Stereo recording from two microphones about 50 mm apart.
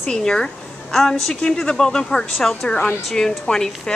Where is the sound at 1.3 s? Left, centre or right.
Centre.